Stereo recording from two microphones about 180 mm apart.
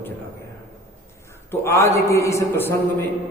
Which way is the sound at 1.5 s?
15° left (ahead or behind).